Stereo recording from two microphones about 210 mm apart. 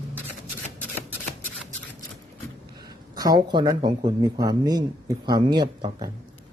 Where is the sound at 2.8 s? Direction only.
20° right (ahead or behind).